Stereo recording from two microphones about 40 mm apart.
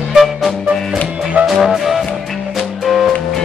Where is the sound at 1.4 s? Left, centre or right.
Centre.